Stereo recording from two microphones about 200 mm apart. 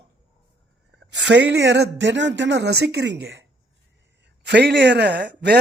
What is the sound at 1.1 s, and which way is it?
Speech, 60° right (ahead or behind).